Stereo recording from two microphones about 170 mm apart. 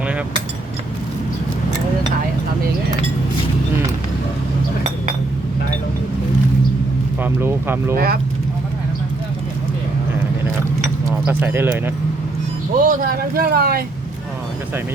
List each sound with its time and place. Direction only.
7.2 s a sound: 15° right (ahead or behind)
7.9 s speech: 60° right (ahead or behind)
11.3 s speech: 10° right (ahead or behind)
12.7 s speech: 55° right (ahead or behind)